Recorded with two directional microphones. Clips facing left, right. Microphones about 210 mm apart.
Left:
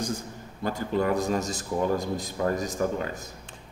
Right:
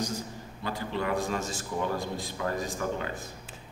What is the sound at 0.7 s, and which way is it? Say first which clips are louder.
A man's voice: left 5 dB; 45° left (ahead or behind).